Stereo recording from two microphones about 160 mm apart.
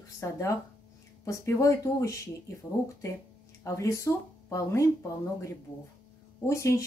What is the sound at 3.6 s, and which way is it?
Speech, 20° left (ahead or behind).